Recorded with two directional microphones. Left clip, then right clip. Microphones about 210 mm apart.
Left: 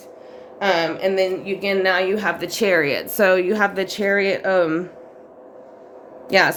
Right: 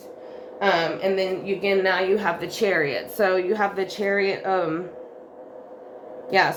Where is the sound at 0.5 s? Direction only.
55° left (ahead or behind).